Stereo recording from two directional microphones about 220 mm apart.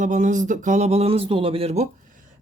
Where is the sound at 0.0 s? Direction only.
35° right (ahead or behind).